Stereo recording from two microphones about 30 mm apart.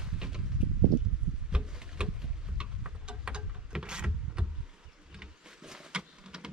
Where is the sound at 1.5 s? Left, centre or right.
Right.